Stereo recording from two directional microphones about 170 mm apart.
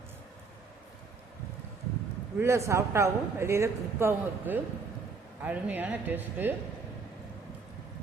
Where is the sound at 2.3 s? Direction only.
15° right (ahead or behind).